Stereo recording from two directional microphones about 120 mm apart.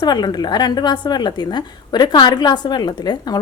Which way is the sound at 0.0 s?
35° left (ahead or behind).